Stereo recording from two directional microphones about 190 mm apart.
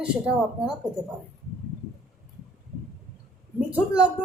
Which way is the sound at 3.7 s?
5° right (ahead or behind).